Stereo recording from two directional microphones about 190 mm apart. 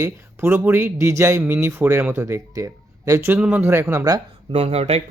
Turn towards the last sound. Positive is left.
turn(degrees=-35)  # may be behind; listen again after turning